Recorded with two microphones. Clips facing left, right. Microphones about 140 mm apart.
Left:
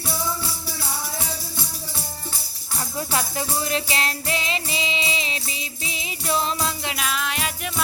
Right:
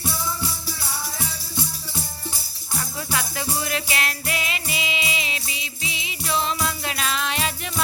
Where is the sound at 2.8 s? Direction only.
35° left (ahead or behind).